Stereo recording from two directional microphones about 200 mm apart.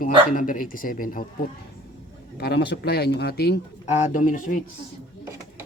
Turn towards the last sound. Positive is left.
turn(degrees=40)  # may be behind; listen again after turning